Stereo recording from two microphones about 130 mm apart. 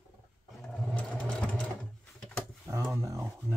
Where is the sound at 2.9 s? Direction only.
25° right (ahead or behind).